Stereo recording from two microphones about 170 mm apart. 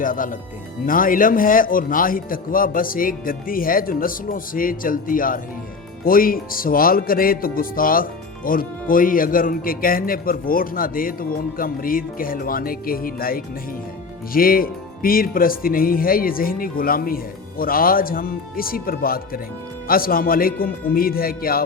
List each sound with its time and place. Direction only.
0.0 s speech: 55° left (ahead or behind)